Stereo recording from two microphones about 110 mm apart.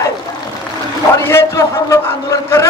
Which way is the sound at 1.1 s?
25° left (ahead or behind).